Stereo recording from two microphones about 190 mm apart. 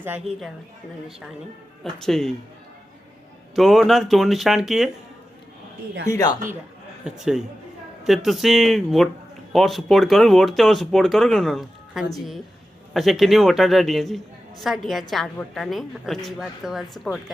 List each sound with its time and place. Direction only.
0.0 s a woman's voice: 5° right (ahead or behind)
1.8 s a woman's voice: centre (ahead or behind)
3.5 s a woman's voice: centre (ahead or behind)
6.1 s speech: 20° left (ahead or behind)
7.0 s a woman's voice: centre (ahead or behind)